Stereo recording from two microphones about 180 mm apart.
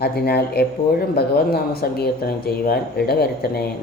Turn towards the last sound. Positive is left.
turn(degrees=60)  # may be behind; listen again after turning